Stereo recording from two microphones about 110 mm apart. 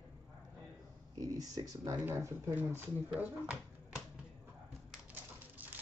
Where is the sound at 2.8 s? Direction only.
15° right (ahead or behind).